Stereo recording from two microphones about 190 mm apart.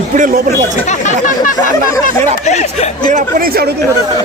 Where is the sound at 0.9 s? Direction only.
40° left (ahead or behind).